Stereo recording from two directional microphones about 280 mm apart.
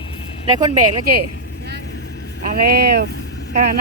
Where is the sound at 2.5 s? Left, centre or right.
Right.